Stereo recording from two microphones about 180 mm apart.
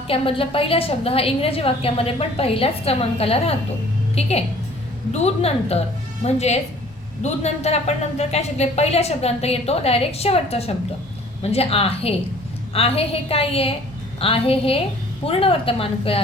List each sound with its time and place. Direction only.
0.1 s a woman's voice: 30° left (ahead or behind)